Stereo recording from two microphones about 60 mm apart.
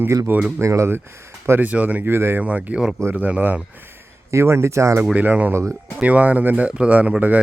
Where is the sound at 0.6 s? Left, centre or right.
Right.